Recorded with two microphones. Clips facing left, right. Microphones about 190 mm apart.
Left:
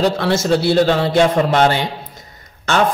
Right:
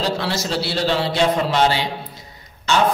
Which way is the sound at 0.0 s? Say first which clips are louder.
Left 6 dB; 50° left (ahead or behind).